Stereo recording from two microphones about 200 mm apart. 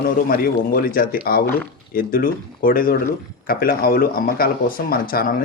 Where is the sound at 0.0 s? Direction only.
50° left (ahead or behind).